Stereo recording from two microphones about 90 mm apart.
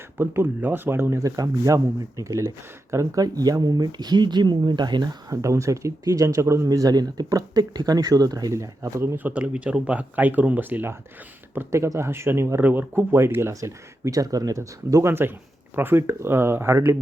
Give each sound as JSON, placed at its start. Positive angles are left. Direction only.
{"t": 0.2, "sound": "speech", "side_deg": -25}
{"t": 1.2, "sound": "speech", "side_deg": -40}
{"t": 5.3, "sound": "speech", "side_deg": -35}
{"t": 9.1, "sound": "speech", "side_deg": -15}
{"t": 11.5, "sound": "speech", "side_deg": -30}
{"t": 15.1, "sound": "speech", "side_deg": -25}